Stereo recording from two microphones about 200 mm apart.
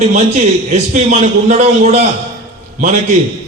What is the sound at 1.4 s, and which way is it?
Speech, 35° right (ahead or behind).